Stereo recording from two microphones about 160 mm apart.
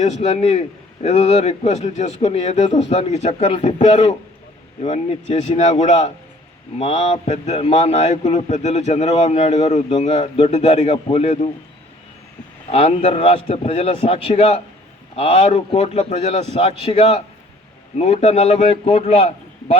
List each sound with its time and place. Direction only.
0.0 s a man's voice: 45° left (ahead or behind)
12.7 s a man's voice: 40° left (ahead or behind)